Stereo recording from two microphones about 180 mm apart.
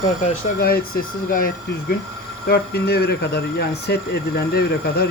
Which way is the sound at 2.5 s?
65° left (ahead or behind).